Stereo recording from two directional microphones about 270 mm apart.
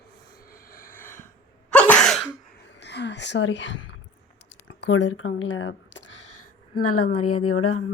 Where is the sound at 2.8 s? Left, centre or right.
Left.